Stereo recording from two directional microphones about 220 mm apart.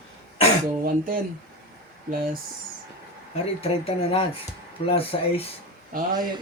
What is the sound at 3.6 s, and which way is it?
Speech, 25° left (ahead or behind).